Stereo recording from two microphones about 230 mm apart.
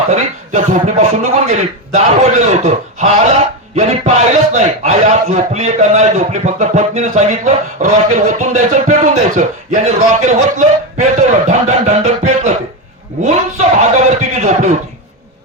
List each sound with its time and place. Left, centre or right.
0.1 s a man's voice: right
13.9 s a man's voice: right